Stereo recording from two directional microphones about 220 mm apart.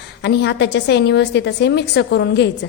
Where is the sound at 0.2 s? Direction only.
50° left (ahead or behind).